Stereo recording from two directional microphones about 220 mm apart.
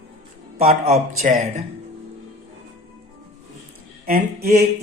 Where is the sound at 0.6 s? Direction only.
30° right (ahead or behind).